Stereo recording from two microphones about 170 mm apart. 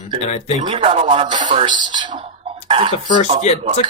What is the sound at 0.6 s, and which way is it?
Speech, 35° right (ahead or behind).